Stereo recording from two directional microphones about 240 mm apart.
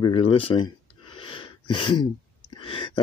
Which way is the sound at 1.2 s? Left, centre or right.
Left.